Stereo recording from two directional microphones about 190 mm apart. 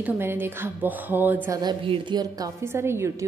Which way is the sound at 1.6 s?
25° right (ahead or behind).